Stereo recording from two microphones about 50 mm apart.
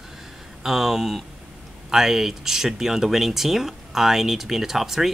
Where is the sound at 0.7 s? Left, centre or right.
Centre.